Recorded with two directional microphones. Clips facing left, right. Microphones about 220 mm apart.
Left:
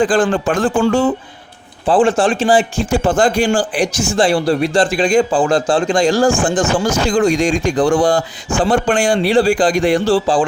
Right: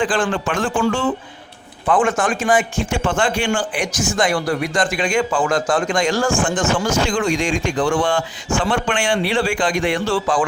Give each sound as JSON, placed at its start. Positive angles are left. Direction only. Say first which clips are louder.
{"t": 0.0, "sound": "speech", "louder": "left 6 dB", "side_deg": 35}